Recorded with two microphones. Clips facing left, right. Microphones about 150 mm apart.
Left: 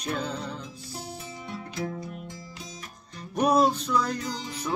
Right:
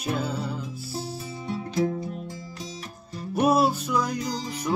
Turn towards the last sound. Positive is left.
turn(degrees=-10)  # may be behind; listen again after turning